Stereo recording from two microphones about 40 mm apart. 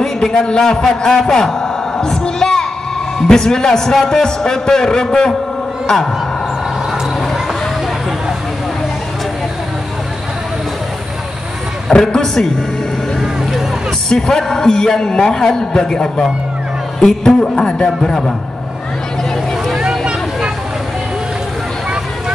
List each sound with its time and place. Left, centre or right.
0.0 s a man's voice: centre
1.2 s a sound: centre
3.2 s a man's voice: centre
11.9 s a man's voice: centre
13.2 s vehicle: centre
14.0 s a man's voice: centre
17.3 s a man's voice: left